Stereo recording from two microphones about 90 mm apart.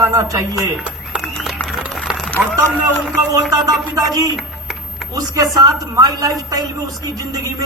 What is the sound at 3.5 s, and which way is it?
Speech, 45° right (ahead or behind).